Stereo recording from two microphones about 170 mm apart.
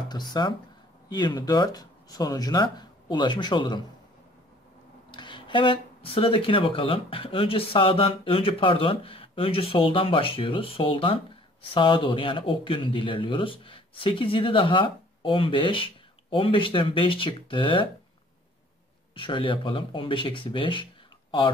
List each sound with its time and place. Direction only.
0.1 s speech: 25° left (ahead or behind)
5.1 s speech: 25° left (ahead or behind)
19.1 s speech: 30° left (ahead or behind)